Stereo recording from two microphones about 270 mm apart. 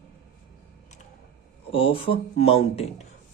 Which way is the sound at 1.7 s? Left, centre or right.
Centre.